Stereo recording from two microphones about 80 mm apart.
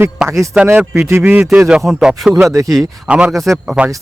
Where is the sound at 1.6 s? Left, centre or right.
Centre.